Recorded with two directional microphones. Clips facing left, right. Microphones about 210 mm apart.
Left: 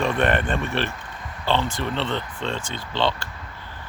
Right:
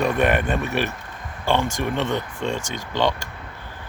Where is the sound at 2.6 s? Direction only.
45° right (ahead or behind).